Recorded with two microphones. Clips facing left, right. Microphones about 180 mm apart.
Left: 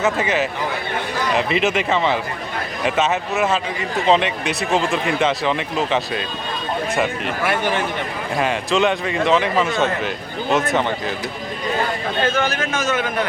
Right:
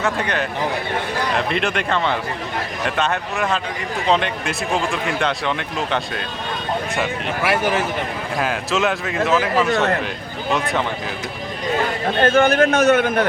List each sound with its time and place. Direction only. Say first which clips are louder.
0.0 s speech: left 3 dB; 5° left (ahead or behind)
12.2 s a man's voice: right 8 dB; 55° right (ahead or behind)